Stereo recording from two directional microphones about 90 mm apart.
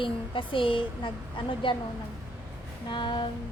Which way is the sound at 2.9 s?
60° left (ahead or behind).